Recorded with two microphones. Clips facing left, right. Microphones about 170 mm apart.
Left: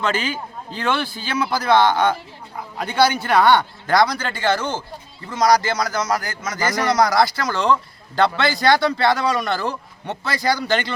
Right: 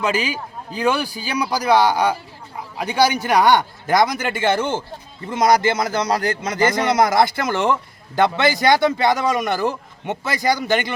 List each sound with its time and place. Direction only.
0.0 s a man's voice: 10° right (ahead or behind)